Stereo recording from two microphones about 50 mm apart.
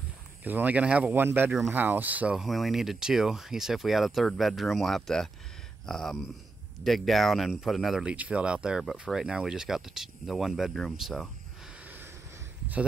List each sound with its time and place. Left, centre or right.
0.4 s speech: right
0.8 s speech: right
1.1 s speech: right
2.3 s speech: centre
8.0 s speech: right; by 11.2 s centre